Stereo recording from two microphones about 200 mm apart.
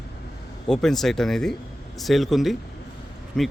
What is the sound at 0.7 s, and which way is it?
Speech, centre (ahead or behind).